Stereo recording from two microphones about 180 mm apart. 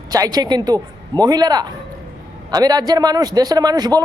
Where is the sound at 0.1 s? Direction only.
20° right (ahead or behind).